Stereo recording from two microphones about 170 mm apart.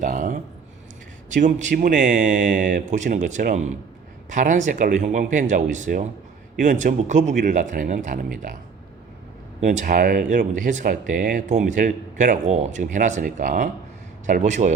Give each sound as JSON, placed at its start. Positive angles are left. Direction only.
{"t": 0.0, "sound": "speech", "side_deg": -50}
{"t": 9.6, "sound": "speech", "side_deg": -45}